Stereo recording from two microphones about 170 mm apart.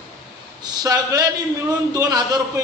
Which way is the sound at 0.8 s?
25° right (ahead or behind).